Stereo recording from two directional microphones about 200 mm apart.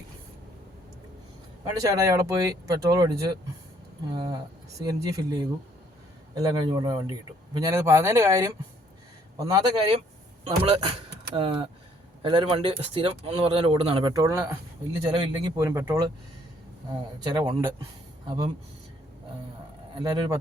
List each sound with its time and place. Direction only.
1.8 s speech: 15° right (ahead or behind)
10.4 s speech: 30° right (ahead or behind)
17.3 s speech: 15° right (ahead or behind)
18.3 s speech: 25° right (ahead or behind)
20.0 s speech: 20° right (ahead or behind)